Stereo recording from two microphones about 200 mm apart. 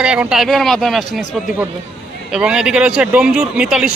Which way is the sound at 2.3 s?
5° right (ahead or behind).